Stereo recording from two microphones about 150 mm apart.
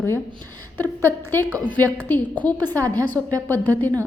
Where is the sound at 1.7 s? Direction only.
10° left (ahead or behind).